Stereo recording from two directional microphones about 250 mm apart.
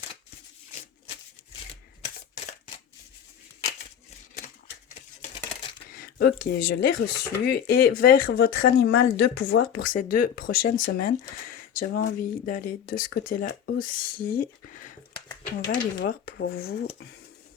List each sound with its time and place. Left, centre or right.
5.9 s speech: left
16.0 s speech: left